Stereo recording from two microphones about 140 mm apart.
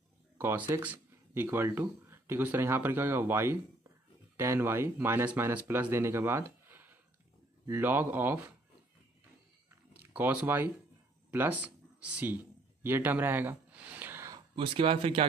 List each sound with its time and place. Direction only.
0.4 s speech: 15° right (ahead or behind)
10.1 s speech: 10° right (ahead or behind)
12.8 s a sound: 15° right (ahead or behind)
14.5 s speech: 40° right (ahead or behind)